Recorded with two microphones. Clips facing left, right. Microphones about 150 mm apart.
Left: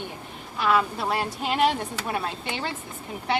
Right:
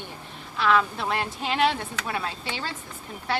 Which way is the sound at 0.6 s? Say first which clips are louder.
Even; 10° left (ahead or behind).